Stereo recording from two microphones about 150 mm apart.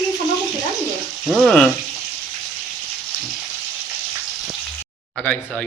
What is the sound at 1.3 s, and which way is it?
Speech, centre (ahead or behind).